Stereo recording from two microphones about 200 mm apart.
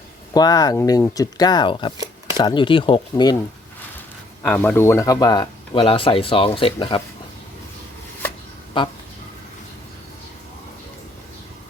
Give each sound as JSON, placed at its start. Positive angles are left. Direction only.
{"t": 0.3, "sound": "speech", "side_deg": 20}
{"t": 4.4, "sound": "speech", "side_deg": 5}